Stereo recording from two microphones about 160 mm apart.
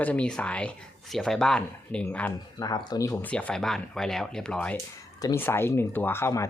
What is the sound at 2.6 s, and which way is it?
Speech, 25° left (ahead or behind).